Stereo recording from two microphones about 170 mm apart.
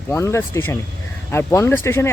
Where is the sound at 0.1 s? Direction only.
15° left (ahead or behind).